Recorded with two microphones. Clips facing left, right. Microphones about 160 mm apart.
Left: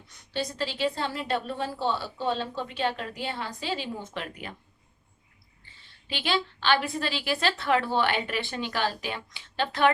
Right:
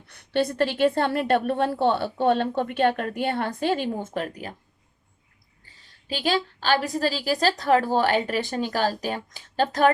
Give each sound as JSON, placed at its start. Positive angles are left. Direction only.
{"t": 0.1, "sound": "a woman's voice", "side_deg": -60}
{"t": 5.6, "sound": "a woman's voice", "side_deg": -40}